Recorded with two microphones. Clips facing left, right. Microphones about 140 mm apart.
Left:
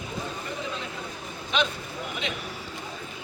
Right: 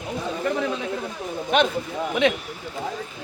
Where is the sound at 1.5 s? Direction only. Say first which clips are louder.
Right 7 dB; 55° right (ahead or behind).